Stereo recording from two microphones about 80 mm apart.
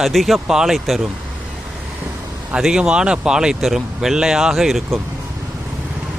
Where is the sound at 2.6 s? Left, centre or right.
Centre.